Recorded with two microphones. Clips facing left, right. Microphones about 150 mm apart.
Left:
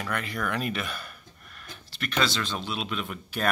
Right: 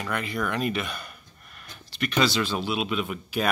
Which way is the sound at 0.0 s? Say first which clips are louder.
Right 2 dB; 5° right (ahead or behind).